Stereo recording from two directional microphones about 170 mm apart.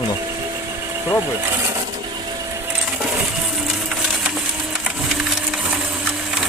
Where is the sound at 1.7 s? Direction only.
25° right (ahead or behind).